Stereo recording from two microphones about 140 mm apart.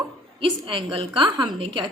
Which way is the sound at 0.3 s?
40° right (ahead or behind).